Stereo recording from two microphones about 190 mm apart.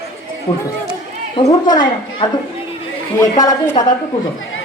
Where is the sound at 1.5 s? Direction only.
20° left (ahead or behind).